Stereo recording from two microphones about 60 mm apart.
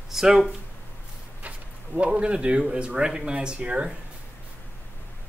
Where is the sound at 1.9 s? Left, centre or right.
Centre.